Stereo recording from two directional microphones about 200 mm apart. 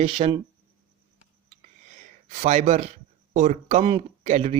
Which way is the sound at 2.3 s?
35° right (ahead or behind).